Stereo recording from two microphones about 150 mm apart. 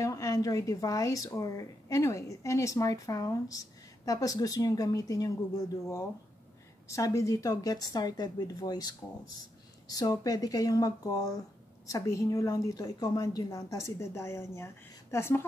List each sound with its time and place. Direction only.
0.0 s speech: 20° left (ahead or behind)